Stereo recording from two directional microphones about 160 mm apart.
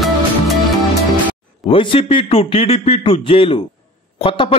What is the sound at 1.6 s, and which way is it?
A man's voice, 35° left (ahead or behind).